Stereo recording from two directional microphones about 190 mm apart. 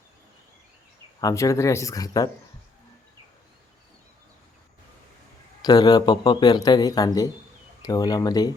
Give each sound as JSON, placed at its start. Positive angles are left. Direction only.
{"t": 1.2, "sound": "speech", "side_deg": 15}
{"t": 5.6, "sound": "speech", "side_deg": 20}